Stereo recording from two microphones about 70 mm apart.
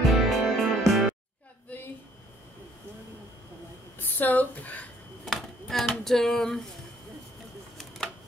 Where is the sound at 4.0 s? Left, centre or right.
Left.